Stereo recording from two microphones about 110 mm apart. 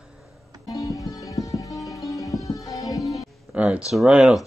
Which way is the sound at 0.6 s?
30° left (ahead or behind).